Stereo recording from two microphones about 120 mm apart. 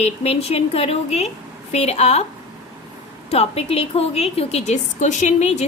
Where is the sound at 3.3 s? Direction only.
60° left (ahead or behind).